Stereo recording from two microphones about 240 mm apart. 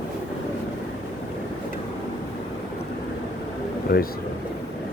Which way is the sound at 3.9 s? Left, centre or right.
Left.